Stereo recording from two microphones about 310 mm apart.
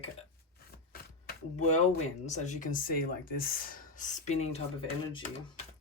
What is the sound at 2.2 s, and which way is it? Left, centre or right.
Speech, left.